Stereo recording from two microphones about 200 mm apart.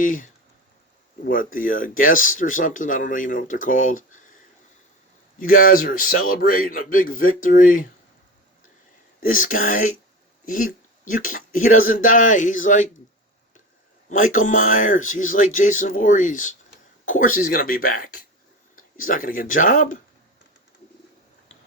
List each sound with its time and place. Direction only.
0.0 s speech: 40° left (ahead or behind)
5.4 s speech: 45° left (ahead or behind)
9.2 s speech: 45° left (ahead or behind)
14.1 s speech: 40° left (ahead or behind)